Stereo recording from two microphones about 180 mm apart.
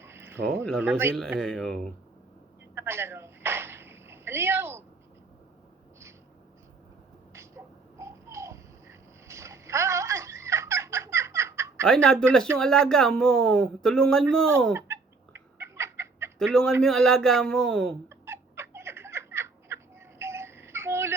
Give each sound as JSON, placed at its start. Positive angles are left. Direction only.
{"t": 0.0, "sound": "a sound", "side_deg": -15}
{"t": 0.6, "sound": "speech", "side_deg": 5}
{"t": 0.9, "sound": "speech", "side_deg": -15}
{"t": 1.1, "sound": "speech", "side_deg": 5}
{"t": 2.7, "sound": "a sound", "side_deg": -15}
{"t": 7.3, "sound": "a sound", "side_deg": -15}
{"t": 11.9, "sound": "speech", "side_deg": 5}
{"t": 14.7, "sound": "chicken", "side_deg": -15}
{"t": 16.4, "sound": "speech", "side_deg": 5}
{"t": 18.1, "sound": "baby laughter", "side_deg": -15}